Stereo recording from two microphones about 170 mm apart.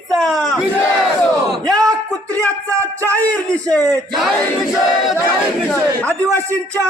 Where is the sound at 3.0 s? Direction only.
10° left (ahead or behind).